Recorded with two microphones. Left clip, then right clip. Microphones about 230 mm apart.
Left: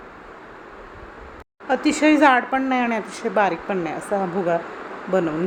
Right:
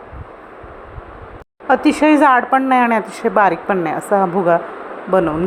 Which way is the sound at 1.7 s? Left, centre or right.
Centre.